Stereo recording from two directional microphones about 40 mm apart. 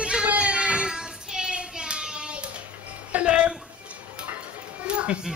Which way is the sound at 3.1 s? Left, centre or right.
Right.